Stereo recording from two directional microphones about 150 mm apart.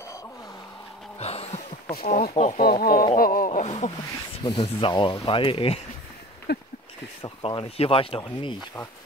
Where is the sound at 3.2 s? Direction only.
75° left (ahead or behind).